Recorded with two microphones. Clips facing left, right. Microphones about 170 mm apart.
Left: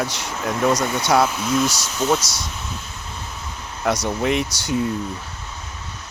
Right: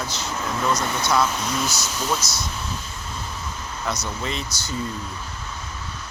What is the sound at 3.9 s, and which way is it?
Speech, 65° left (ahead or behind).